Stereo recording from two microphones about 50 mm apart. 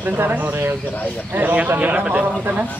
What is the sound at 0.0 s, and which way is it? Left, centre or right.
Speech, right.